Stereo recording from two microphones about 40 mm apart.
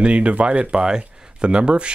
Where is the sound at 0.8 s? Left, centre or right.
Right.